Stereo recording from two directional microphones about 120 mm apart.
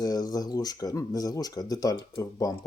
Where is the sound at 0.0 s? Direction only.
30° left (ahead or behind).